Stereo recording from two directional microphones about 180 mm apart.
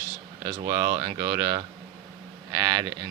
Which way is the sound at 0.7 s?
20° right (ahead or behind).